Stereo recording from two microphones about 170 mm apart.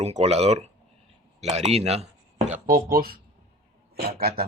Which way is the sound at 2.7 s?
60° right (ahead or behind).